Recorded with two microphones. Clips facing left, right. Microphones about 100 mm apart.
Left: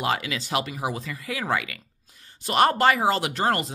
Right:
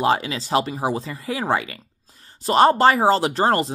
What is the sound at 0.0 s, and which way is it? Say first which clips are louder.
Speech: right 6 dB; 30° right (ahead or behind).